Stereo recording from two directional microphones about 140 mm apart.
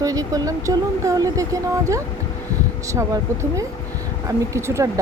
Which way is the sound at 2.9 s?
20° right (ahead or behind).